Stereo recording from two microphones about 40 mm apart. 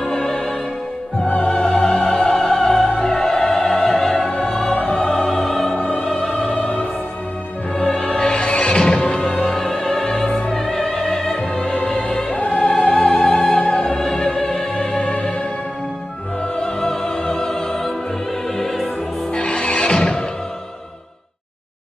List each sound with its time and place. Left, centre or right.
0.0 s music: centre
1.2 s opera: left
1.6 s opera: centre
4.5 s music: centre
4.7 s music: centre
5.9 s opera: centre
7.7 s music: centre
8.2 s music: left
12.5 s opera: centre
16.5 s opera: centre
19.3 s music: left